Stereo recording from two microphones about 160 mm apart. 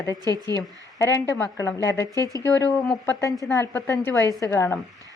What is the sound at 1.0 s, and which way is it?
Speech, 20° left (ahead or behind).